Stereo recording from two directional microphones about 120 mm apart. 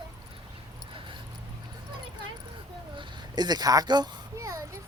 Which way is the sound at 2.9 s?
35° right (ahead or behind).